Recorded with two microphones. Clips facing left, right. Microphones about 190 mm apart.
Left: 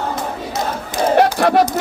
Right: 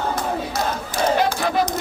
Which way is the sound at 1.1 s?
75° left (ahead or behind).